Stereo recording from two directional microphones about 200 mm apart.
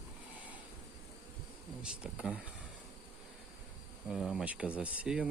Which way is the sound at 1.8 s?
5° right (ahead or behind).